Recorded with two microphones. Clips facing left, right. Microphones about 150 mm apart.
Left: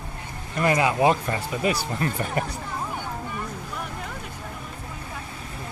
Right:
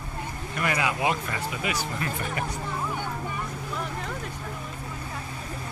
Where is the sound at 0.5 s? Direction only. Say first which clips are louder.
Left 6 dB; 30° left (ahead or behind).